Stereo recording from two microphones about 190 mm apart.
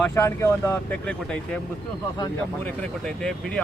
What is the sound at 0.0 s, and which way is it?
Speech, 15° left (ahead or behind).